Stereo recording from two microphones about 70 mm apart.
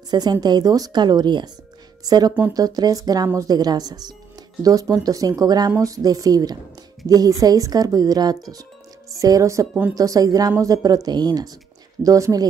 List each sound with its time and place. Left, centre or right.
0.1 s speech: right
2.0 s a woman's voice: right
4.6 s a woman's voice: right
5.8 s a woman's voice: right
7.1 s a woman's voice: right
9.1 s a woman's voice: right
12.0 s a woman's voice: right